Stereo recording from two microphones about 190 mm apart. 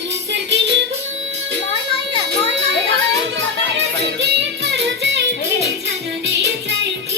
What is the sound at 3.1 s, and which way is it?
Music, 70° right (ahead or behind).